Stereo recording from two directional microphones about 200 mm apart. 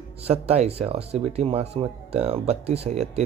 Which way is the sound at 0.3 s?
30° right (ahead or behind).